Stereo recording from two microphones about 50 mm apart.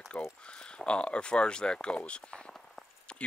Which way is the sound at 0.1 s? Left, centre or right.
Left.